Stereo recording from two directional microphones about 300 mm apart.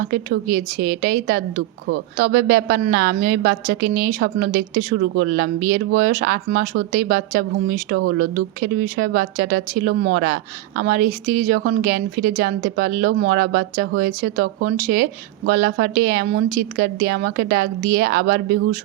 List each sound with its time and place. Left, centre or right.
0.0 s speech: right